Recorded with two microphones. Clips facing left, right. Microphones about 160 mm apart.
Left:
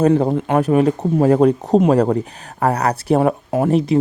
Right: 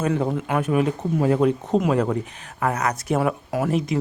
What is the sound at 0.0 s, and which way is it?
Speech, 35° left (ahead or behind).